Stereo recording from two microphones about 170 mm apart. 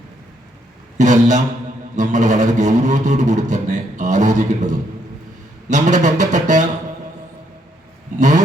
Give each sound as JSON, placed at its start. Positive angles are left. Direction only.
{"t": 0.9, "sound": "a man's voice", "side_deg": -45}
{"t": 8.2, "sound": "a man's voice", "side_deg": -45}